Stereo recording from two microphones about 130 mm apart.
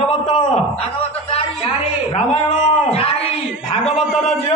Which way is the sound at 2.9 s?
50° left (ahead or behind).